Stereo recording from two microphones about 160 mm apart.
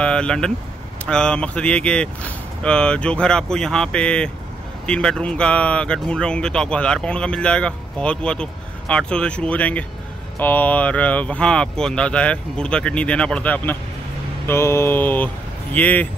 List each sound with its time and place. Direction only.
0.0 s speech: 5° left (ahead or behind)